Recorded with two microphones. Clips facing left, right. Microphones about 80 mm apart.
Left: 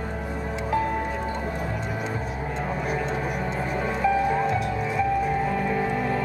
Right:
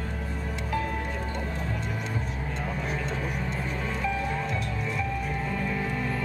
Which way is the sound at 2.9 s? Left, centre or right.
Centre.